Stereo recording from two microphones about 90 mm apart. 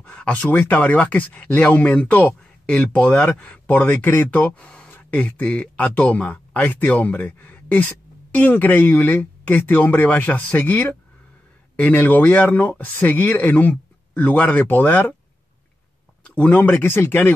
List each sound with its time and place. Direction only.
0.0 s speech: 15° left (ahead or behind)
16.3 s speech: 15° left (ahead or behind)